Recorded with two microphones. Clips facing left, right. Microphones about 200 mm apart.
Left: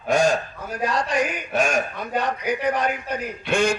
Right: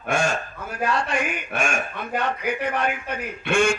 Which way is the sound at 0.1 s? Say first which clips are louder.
Left 5 dB; 35° left (ahead or behind).